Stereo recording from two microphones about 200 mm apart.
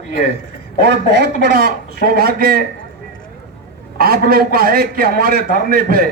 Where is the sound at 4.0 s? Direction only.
50° right (ahead or behind).